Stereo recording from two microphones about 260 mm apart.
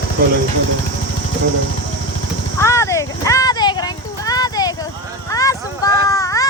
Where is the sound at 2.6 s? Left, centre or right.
Centre.